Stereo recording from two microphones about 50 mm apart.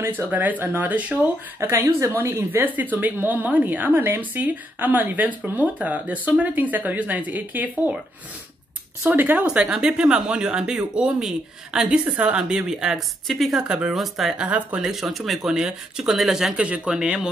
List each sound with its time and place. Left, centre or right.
0.3 s speech: right
0.9 s speech: right
1.6 s a woman's voice: right
9.1 s speech: right
9.5 s speech: centre
12.9 s speech: centre
13.7 s speech: centre
13.9 s speech: centre
14.4 s speech: right
14.8 s speech: centre
15.4 s speech: centre
16.5 s speech: right